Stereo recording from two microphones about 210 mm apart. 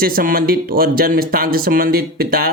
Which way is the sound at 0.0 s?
45° right (ahead or behind).